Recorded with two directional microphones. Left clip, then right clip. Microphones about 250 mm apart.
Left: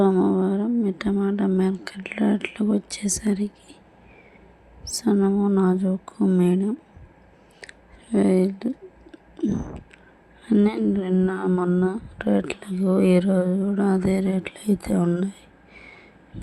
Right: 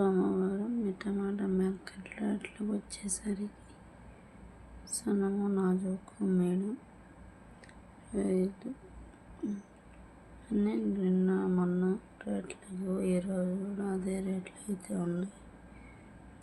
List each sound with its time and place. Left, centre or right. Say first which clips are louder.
0.0 s speech: left 10 dB; left
4.9 s speech: left 11 dB; left
7.6 s a sound: left 16 dB; left
10.5 s speech: left 12 dB; left